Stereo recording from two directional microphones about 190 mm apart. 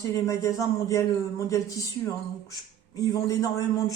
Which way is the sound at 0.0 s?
15° left (ahead or behind).